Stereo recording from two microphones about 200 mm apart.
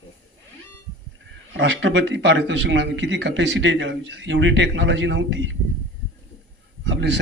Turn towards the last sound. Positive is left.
turn(degrees=-60)  # may be behind; listen again after turning